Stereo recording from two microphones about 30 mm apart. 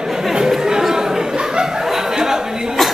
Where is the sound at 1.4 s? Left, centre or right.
Right.